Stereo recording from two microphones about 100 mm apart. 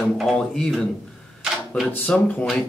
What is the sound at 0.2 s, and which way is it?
Speech, 5° left (ahead or behind).